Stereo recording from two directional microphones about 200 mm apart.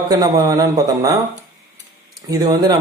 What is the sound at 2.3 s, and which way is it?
Speech, 20° right (ahead or behind).